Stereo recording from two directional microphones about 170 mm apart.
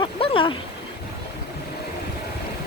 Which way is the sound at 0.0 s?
30° left (ahead or behind).